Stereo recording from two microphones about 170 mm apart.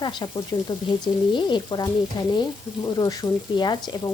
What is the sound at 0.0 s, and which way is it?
Frying, 25° left (ahead or behind).